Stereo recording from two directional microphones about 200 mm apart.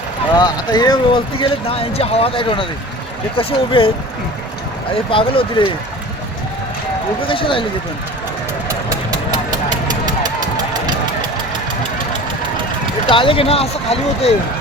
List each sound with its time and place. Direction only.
0.3 s speech: 20° left (ahead or behind)
5.1 s speech: 25° left (ahead or behind)
7.3 s speech: 25° left (ahead or behind)
8.6 s vehicle: 15° right (ahead or behind)
13.1 s speech: 25° left (ahead or behind)